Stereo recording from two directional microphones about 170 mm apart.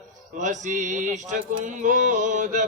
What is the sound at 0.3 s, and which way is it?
Speech, 45° right (ahead or behind).